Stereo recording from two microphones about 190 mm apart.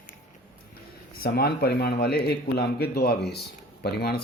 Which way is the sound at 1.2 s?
55° left (ahead or behind).